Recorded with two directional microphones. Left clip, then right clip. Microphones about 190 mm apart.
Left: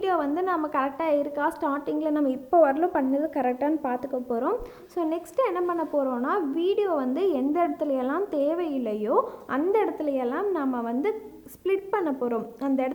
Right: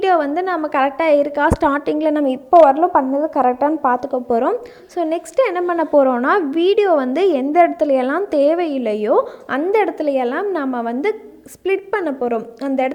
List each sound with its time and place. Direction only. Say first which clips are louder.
0.0 s a woman's voice: right 9 dB; 25° right (ahead or behind)